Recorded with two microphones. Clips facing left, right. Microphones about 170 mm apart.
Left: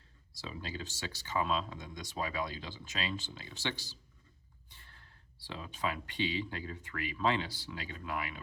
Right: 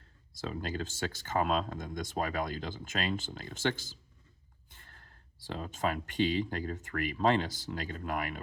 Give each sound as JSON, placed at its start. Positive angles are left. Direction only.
{"t": 0.3, "sound": "speech", "side_deg": -50}